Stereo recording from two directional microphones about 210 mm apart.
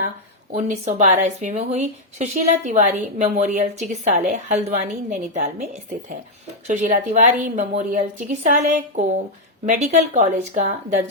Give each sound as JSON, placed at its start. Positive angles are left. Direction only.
{"t": 0.5, "sound": "a woman's voice", "side_deg": -35}
{"t": 9.6, "sound": "a woman's voice", "side_deg": -35}